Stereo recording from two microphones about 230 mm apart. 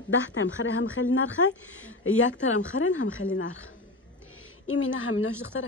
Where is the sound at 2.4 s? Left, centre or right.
Left.